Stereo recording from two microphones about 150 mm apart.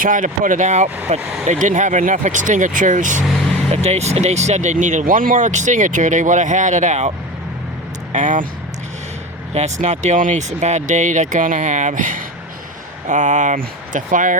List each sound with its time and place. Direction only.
0.0 s speech: 60° right (ahead or behind)
3.8 s speech: 45° right (ahead or behind)
8.1 s speech: 55° right (ahead or behind)
9.6 s speech: 50° right (ahead or behind)